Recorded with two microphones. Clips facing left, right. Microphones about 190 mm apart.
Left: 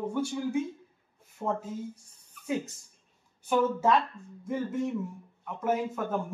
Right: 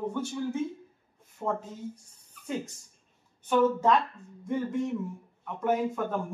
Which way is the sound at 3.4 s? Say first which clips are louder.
Right 2 dB; 10° left (ahead or behind).